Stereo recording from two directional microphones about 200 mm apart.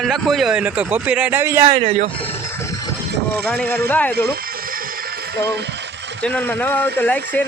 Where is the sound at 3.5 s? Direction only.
10° left (ahead or behind).